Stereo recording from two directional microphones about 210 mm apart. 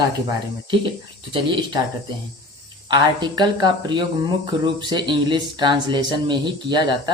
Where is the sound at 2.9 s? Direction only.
20° right (ahead or behind).